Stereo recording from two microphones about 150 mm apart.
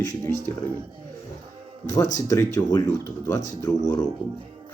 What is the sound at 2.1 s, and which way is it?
Speech, 20° left (ahead or behind).